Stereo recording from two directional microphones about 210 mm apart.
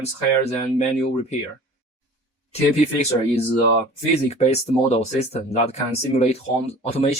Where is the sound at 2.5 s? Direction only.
30° left (ahead or behind).